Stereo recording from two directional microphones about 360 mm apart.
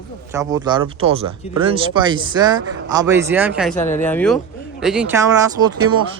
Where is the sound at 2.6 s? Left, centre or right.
Right.